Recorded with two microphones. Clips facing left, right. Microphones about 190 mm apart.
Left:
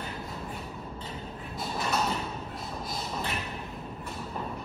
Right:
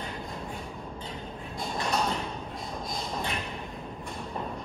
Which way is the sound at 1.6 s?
5° left (ahead or behind).